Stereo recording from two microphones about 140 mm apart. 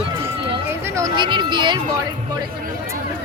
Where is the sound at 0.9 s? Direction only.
30° right (ahead or behind).